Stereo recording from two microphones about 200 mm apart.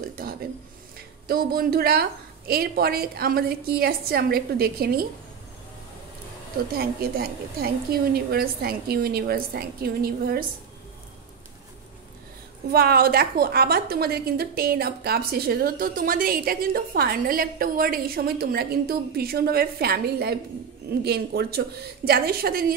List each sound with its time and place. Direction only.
0.1 s a sound: 45° right (ahead or behind)
0.9 s a woman's voice: 50° right (ahead or behind)
6.7 s a woman's voice: 50° right (ahead or behind)
12.7 s a woman's voice: 50° right (ahead or behind)